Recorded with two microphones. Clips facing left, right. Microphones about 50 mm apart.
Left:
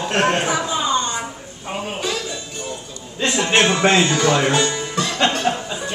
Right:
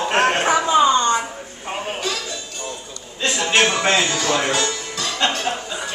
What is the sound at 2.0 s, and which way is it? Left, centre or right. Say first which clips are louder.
Music: left 1 dB; centre.